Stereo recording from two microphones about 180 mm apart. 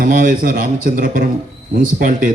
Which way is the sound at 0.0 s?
50° right (ahead or behind).